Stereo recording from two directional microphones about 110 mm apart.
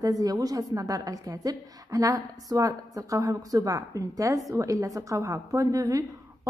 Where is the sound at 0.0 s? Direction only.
35° right (ahead or behind).